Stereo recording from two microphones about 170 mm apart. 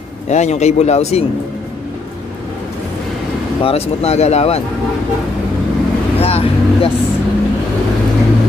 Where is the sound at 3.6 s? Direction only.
35° left (ahead or behind).